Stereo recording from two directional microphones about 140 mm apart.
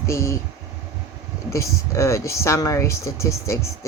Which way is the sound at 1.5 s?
20° left (ahead or behind).